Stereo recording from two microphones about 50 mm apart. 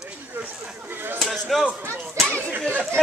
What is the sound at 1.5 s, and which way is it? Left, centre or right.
Speech, centre.